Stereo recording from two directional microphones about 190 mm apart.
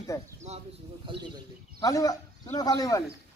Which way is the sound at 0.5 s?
35° right (ahead or behind).